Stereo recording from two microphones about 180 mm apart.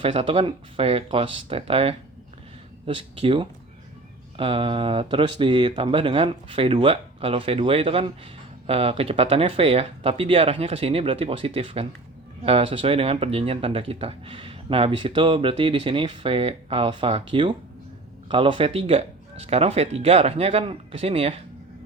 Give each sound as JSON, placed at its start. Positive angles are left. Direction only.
{"t": 0.0, "sound": "speech", "side_deg": -30}